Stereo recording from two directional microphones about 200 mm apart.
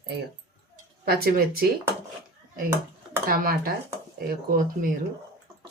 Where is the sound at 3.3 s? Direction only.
45° right (ahead or behind).